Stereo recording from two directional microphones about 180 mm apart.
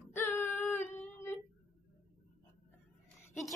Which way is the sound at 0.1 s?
10° left (ahead or behind).